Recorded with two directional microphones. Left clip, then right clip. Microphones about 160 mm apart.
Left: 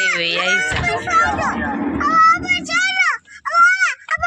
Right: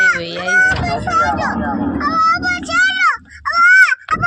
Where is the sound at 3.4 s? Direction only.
30° left (ahead or behind).